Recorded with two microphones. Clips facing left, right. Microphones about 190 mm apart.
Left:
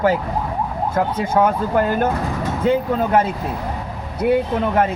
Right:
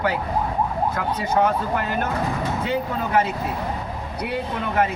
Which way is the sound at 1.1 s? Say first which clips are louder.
Left 1 dB; 50° left (ahead or behind).